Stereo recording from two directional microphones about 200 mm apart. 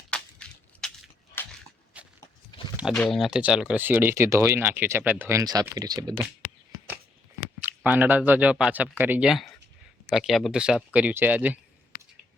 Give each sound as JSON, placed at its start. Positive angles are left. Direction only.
{"t": 0.1, "sound": "crushing", "side_deg": 5}
{"t": 1.4, "sound": "a sound", "side_deg": 10}
{"t": 2.0, "sound": "walk", "side_deg": -5}
{"t": 2.7, "sound": "a sound", "side_deg": -5}
{"t": 3.0, "sound": "speech", "side_deg": 0}
{"t": 7.9, "sound": "speech", "side_deg": -10}